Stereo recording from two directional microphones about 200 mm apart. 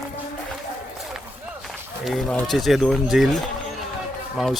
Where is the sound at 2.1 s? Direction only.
Centre (ahead or behind).